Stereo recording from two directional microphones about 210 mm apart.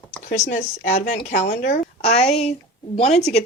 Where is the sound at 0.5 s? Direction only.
35° left (ahead or behind).